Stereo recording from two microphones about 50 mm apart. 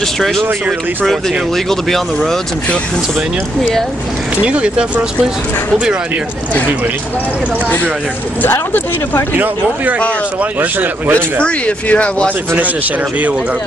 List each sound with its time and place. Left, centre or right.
4.5 s speech: right
8.4 s speech: left
11.4 s speech: left